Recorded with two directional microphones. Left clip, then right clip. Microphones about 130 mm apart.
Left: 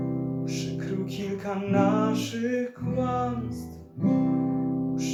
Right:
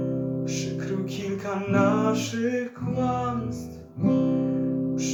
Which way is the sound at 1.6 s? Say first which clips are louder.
Right 2 dB; 10° right (ahead or behind).